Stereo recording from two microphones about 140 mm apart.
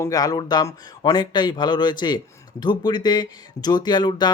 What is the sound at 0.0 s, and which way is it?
Speech, 25° left (ahead or behind).